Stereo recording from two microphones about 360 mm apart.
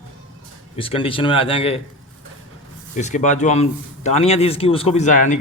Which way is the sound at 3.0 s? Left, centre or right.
Centre.